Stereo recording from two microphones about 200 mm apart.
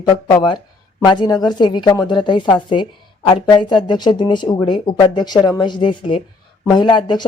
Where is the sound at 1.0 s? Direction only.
20° left (ahead or behind).